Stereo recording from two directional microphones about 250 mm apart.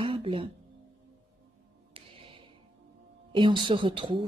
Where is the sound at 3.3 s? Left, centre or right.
Centre.